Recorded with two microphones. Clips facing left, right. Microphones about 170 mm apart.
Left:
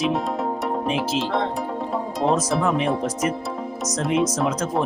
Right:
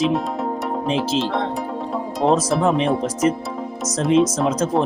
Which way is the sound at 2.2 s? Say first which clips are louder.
Right 4 dB; 30° right (ahead or behind).